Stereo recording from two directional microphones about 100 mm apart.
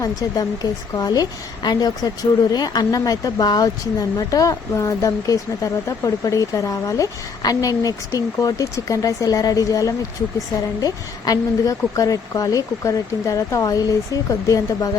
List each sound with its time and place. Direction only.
0.0 s speech: 40° left (ahead or behind)